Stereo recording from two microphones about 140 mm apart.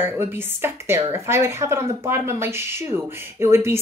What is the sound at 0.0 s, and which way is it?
Speech, 15° right (ahead or behind).